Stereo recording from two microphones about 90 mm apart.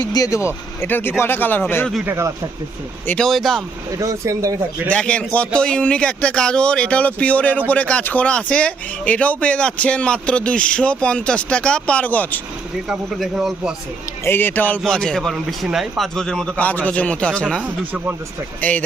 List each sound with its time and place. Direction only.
0.1 s speech: 40° left (ahead or behind); by 1.6 s 20° left (ahead or behind)
2.0 s speech: 30° right (ahead or behind)
3.2 s a man's voice: centre (ahead or behind)
3.9 s speech: 35° right (ahead or behind)
4.9 s speech: 10° left (ahead or behind)
13.1 s speech: 5° right (ahead or behind)
14.3 s speech: 25° left (ahead or behind)
14.8 s a man's voice: 5° left (ahead or behind)
16.6 s speech: 15° left (ahead or behind)
17.6 s speech: 15° right (ahead or behind)